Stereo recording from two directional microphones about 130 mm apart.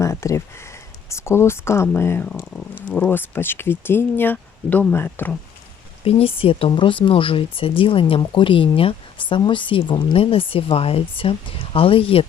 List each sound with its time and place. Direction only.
0.0 s speech: 25° left (ahead or behind)
6.1 s speech: 45° left (ahead or behind)